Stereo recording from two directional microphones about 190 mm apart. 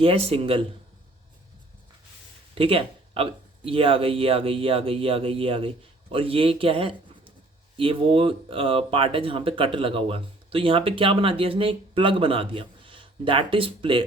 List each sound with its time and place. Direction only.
0.0 s speech: 30° right (ahead or behind)
2.6 s speech: 30° right (ahead or behind)